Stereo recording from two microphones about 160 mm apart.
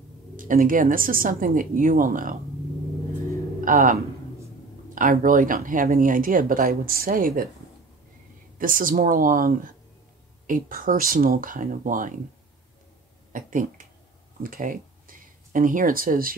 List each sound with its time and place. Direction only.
0.4 s speech: 60° right (ahead or behind)
3.6 s speech: 55° right (ahead or behind)
8.5 s speech: 60° right (ahead or behind)
13.3 s speech: 55° right (ahead or behind)